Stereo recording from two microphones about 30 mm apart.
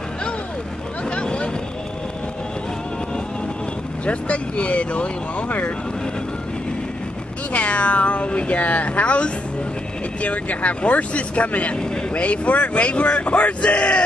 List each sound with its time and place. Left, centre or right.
1.1 s vehicle: left
4.0 s speech: left
7.5 s speech: left
10.2 s speech: left